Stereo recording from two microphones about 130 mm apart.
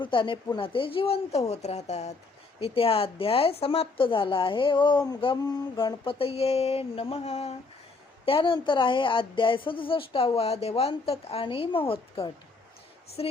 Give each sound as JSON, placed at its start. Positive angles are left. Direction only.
{"t": 0.0, "sound": "a woman's voice", "side_deg": 40}
{"t": 2.6, "sound": "a woman's voice", "side_deg": 45}